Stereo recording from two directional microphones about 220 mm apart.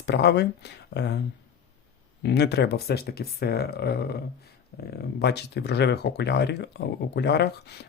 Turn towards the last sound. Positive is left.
turn(degrees=50)  # may be behind; listen again after turning